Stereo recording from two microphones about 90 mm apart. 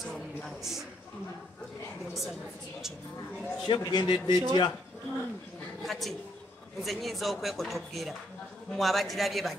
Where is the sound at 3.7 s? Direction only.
60° left (ahead or behind).